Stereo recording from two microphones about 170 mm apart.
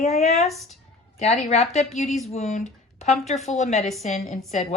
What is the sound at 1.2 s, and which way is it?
A woman's voice, 40° left (ahead or behind).